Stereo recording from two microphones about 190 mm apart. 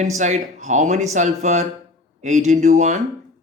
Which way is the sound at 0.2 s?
40° right (ahead or behind).